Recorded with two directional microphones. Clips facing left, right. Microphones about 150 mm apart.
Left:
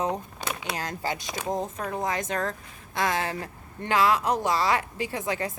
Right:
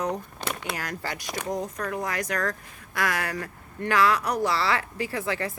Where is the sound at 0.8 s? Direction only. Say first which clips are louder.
Left 2 dB; 25° left (ahead or behind).